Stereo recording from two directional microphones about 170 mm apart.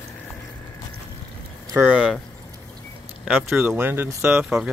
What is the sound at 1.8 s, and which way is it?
Speech, 5° right (ahead or behind).